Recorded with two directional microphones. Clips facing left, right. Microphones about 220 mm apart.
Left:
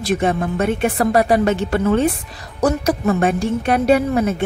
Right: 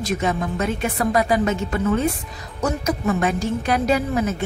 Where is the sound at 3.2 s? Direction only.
55° left (ahead or behind).